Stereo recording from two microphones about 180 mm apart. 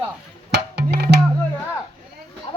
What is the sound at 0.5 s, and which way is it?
Music, 65° right (ahead or behind).